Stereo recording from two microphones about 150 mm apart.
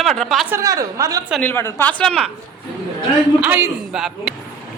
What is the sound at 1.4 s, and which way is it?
Speech, 15° left (ahead or behind).